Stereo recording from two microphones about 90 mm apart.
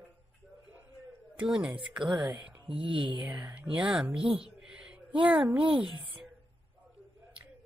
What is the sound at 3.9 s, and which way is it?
Speech, 10° right (ahead or behind).